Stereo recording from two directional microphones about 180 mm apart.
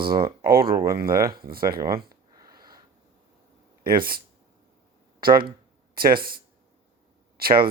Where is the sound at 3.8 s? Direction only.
55° right (ahead or behind).